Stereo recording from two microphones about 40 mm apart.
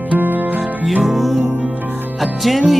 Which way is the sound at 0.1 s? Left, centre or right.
Right.